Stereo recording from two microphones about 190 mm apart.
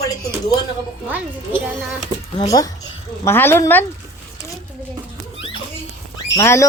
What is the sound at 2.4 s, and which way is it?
Speech, 20° left (ahead or behind).